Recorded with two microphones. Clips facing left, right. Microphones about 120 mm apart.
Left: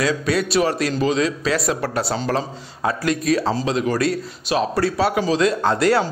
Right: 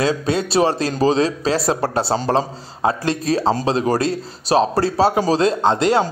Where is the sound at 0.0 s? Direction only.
25° right (ahead or behind).